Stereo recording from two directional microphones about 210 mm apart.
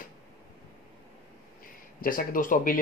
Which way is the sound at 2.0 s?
40° left (ahead or behind).